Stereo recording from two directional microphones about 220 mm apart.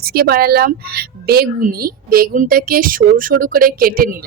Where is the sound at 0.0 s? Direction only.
45° right (ahead or behind).